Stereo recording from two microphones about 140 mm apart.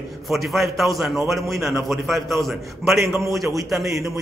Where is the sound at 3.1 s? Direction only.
20° right (ahead or behind).